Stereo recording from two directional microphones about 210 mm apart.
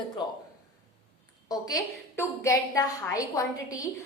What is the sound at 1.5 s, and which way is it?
A woman's voice, 15° left (ahead or behind).